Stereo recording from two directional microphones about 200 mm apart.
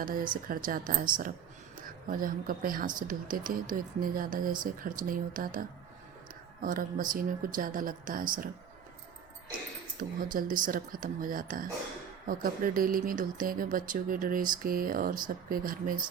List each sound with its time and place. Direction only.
0.0 s speech: 45° right (ahead or behind)
2.0 s speech: 45° right (ahead or behind)
10.0 s speech: 45° right (ahead or behind)